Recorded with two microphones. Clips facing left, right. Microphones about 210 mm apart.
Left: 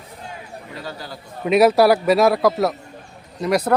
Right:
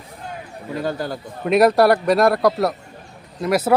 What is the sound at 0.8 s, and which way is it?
Speech, 50° right (ahead or behind).